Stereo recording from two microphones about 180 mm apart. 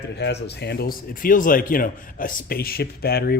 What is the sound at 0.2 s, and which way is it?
Speech, 70° left (ahead or behind).